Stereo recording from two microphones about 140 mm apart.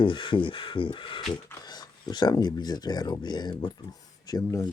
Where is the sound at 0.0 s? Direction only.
35° left (ahead or behind).